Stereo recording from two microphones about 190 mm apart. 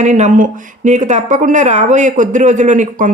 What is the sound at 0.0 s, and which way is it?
Speech, 40° right (ahead or behind).